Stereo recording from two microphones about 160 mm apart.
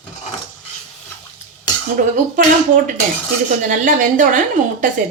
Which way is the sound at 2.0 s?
60° right (ahead or behind).